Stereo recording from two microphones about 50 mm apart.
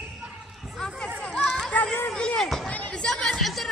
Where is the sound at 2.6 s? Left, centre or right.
Left.